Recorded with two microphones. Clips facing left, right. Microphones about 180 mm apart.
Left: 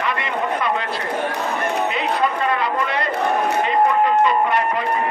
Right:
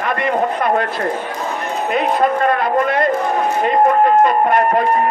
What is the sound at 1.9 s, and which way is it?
A man's voice, 50° right (ahead or behind).